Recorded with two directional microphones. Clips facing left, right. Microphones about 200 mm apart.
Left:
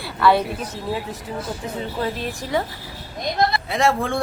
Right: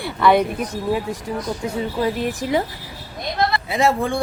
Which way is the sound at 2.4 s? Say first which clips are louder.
Right 1 dB; 20° right (ahead or behind).